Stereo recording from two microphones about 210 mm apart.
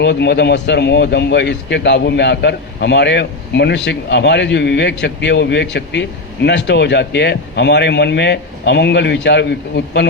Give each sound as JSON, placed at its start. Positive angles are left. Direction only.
{"t": 0.0, "sound": "speech", "side_deg": 55}